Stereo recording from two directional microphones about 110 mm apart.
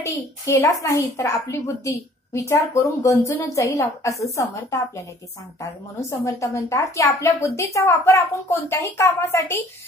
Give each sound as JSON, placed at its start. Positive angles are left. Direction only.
{"t": 0.0, "sound": "a woman's voice", "side_deg": 30}